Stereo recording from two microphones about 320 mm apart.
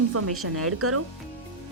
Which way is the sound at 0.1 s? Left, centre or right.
Right.